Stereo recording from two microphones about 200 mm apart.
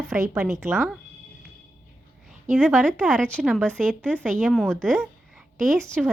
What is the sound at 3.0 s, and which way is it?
A woman's voice, 5° left (ahead or behind).